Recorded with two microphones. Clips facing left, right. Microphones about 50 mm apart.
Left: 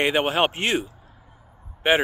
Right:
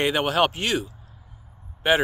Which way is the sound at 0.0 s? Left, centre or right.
Left.